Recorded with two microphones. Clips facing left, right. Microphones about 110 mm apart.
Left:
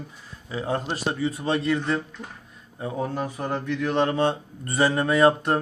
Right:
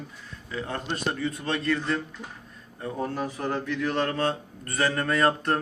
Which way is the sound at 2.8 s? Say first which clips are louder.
Left 2 dB; 10° left (ahead or behind).